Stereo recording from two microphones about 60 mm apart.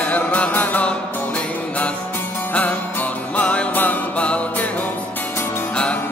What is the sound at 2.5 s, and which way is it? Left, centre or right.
Music, left.